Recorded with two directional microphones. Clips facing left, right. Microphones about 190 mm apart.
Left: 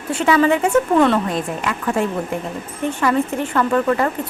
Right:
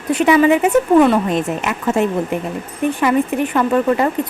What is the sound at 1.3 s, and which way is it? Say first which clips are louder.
Speech: right 3 dB; 20° right (ahead or behind).